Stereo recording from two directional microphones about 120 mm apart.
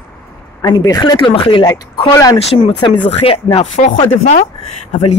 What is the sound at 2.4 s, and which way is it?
A woman's voice, 50° left (ahead or behind).